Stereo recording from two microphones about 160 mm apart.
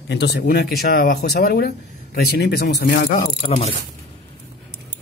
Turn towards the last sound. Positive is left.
turn(degrees=40)  # may be behind; listen again after turning